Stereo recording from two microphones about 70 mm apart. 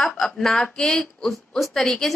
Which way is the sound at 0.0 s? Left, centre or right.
Centre.